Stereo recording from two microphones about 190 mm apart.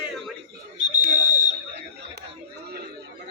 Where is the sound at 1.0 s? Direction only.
40° right (ahead or behind).